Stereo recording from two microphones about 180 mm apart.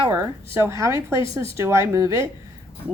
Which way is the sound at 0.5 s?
15° right (ahead or behind).